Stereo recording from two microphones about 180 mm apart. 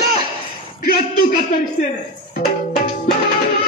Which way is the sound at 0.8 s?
55° left (ahead or behind).